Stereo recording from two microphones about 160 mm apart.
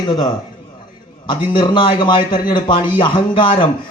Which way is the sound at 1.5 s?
30° left (ahead or behind).